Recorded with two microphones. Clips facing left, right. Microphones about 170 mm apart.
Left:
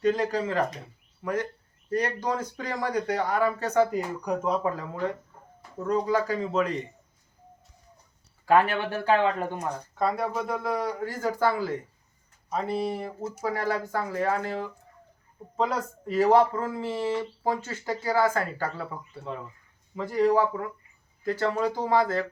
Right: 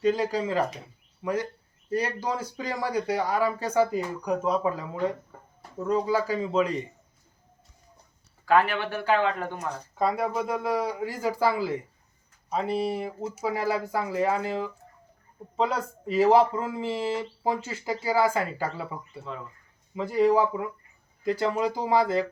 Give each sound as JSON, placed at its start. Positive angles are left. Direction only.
{"t": 0.0, "sound": "speech", "side_deg": -10}
{"t": 9.1, "sound": "speech", "side_deg": 15}
{"t": 9.9, "sound": "speech", "side_deg": -10}
{"t": 15.5, "sound": "speech", "side_deg": -5}
{"t": 19.2, "sound": "speech", "side_deg": 15}
{"t": 20.1, "sound": "speech", "side_deg": -10}